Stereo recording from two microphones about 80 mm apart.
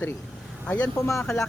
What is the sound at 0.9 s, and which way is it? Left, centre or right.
Speech, left.